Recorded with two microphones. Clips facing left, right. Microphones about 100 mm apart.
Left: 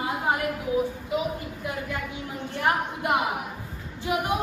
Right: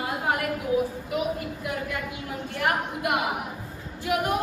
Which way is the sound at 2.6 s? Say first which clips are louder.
Left 1 dB; 30° left (ahead or behind).